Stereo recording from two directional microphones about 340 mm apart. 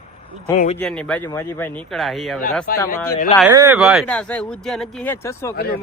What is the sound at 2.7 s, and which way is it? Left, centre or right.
Speech, left.